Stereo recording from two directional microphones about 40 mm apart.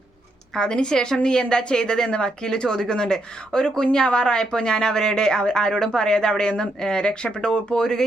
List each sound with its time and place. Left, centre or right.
0.5 s speech: left